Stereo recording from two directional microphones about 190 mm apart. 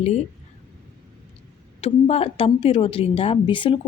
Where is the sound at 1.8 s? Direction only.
30° left (ahead or behind).